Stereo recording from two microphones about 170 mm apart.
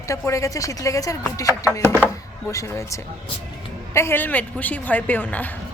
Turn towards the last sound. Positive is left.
turn(degrees=10)  # may be behind; listen again after turning